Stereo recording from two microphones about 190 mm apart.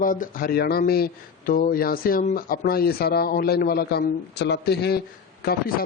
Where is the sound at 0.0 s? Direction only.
45° left (ahead or behind).